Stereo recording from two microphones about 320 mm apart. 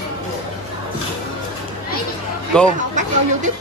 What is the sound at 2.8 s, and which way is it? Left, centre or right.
Speech, right.